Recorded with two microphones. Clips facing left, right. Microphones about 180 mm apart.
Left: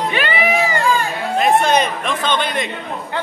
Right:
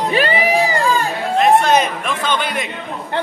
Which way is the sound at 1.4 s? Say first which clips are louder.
Right 2 dB; 5° right (ahead or behind).